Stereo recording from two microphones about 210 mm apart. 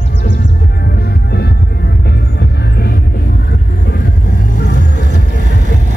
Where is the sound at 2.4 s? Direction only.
50° left (ahead or behind).